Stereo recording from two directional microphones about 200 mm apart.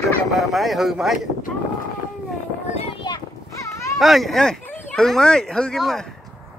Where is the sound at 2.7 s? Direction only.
30° left (ahead or behind).